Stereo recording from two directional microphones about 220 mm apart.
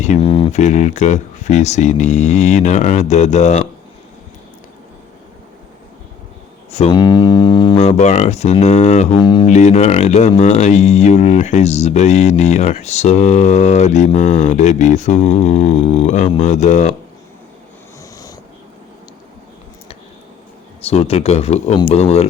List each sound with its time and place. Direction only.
0.0 s speech: 30° left (ahead or behind)
6.7 s speech: 25° left (ahead or behind)
9.5 s speech: 30° left (ahead or behind)
20.8 s speech: 25° left (ahead or behind)